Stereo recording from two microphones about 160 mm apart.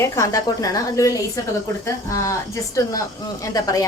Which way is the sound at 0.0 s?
20° left (ahead or behind).